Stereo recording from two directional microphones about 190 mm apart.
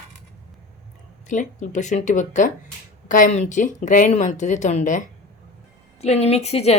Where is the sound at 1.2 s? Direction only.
40° left (ahead or behind).